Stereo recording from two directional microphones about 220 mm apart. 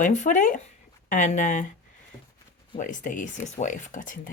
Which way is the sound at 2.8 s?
35° left (ahead or behind).